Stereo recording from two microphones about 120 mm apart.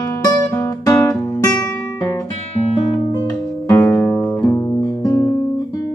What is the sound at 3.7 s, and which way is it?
Music, 20° left (ahead or behind).